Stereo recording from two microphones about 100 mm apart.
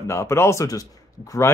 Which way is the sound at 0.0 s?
25° left (ahead or behind).